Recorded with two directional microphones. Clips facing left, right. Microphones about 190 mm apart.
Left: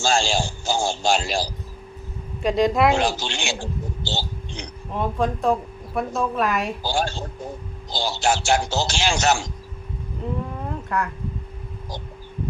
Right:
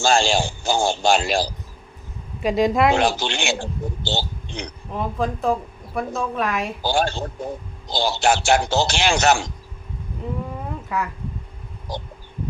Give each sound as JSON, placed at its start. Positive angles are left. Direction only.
{"t": 0.0, "sound": "a man's voice", "side_deg": -60}
{"t": 2.4, "sound": "a woman's voice", "side_deg": 0}
{"t": 2.9, "sound": "a man's voice", "side_deg": -60}
{"t": 4.9, "sound": "a woman's voice", "side_deg": 0}
{"t": 6.8, "sound": "a man's voice", "side_deg": -60}
{"t": 10.7, "sound": "a sound", "side_deg": -5}